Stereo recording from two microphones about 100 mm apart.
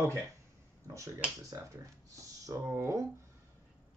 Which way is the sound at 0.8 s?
30° right (ahead or behind).